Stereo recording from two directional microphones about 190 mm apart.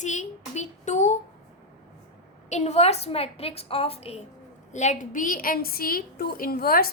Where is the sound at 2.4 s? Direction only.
35° left (ahead or behind).